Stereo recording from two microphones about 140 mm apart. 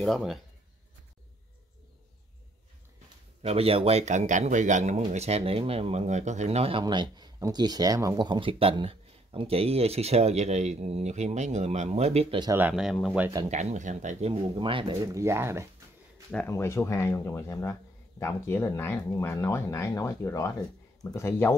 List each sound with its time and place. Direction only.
0.0 s speech: centre (ahead or behind)
3.4 s speech: 45° right (ahead or behind)
6.8 s speech: 30° right (ahead or behind); by 12.4 s 50° right (ahead or behind)
12.5 s speech: 10° right (ahead or behind)
13.5 s speech: 55° right (ahead or behind); by 15.0 s 40° right (ahead or behind)
15.0 s speech: 20° right (ahead or behind)
16.4 s speech: 20° left (ahead or behind)